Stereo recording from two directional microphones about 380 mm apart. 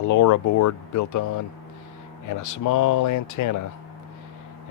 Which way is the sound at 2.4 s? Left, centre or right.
Left.